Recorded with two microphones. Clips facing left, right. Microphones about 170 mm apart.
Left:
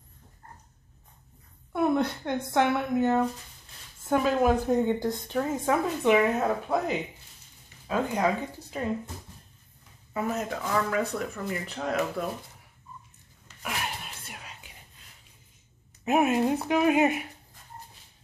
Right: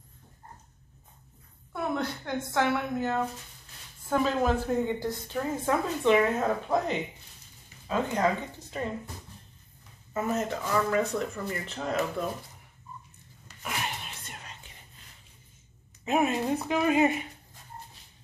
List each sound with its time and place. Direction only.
1.7 s a woman's voice: 20° left (ahead or behind)
10.2 s speech: centre (ahead or behind)
13.6 s whispering: 5° left (ahead or behind)
16.1 s a woman's voice: 5° left (ahead or behind)